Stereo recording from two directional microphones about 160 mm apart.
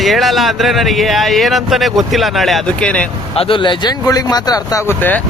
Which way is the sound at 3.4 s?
30° left (ahead or behind).